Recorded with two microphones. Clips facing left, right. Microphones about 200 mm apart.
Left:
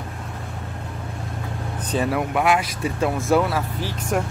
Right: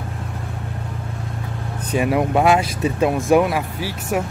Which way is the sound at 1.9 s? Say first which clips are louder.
Right 4 dB; 15° right (ahead or behind).